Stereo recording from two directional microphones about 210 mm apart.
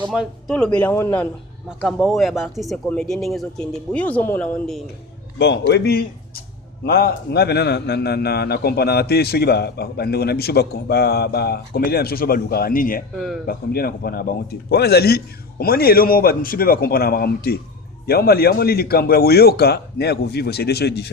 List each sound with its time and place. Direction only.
0.1 s a man's voice: centre (ahead or behind)
5.4 s a man's voice: 55° left (ahead or behind)
13.1 s speech: centre (ahead or behind)
13.5 s a man's voice: 45° left (ahead or behind)